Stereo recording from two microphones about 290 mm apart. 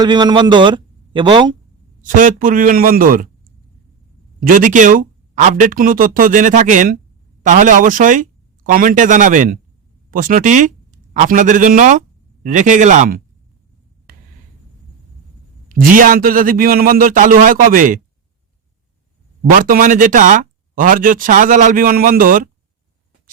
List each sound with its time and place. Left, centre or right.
0.0 s a man's voice: centre
2.0 s speech: right
4.4 s speech: right
15.7 s speech: right
19.5 s speech: right